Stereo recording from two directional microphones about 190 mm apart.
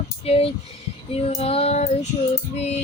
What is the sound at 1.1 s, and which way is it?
Female singing, 30° left (ahead or behind).